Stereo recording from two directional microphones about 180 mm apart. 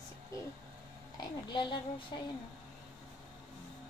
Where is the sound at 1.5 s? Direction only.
25° left (ahead or behind).